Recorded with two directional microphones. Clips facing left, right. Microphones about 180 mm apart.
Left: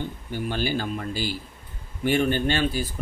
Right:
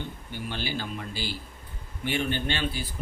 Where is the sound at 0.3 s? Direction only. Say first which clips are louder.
Left 7 dB; 45° left (ahead or behind).